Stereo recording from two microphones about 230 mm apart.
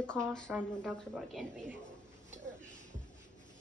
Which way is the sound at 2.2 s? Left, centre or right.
Right.